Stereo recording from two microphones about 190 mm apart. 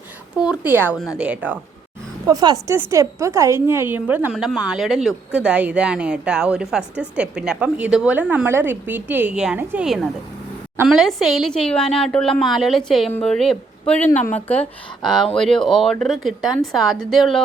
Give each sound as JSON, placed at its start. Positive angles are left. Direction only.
{"t": 0.3, "sound": "a woman's voice", "side_deg": -5}
{"t": 2.2, "sound": "a woman's voice", "side_deg": -20}